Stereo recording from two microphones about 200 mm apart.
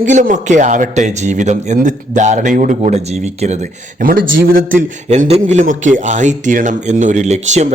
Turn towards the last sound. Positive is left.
turn(degrees=-35)  # may be behind; listen again after turning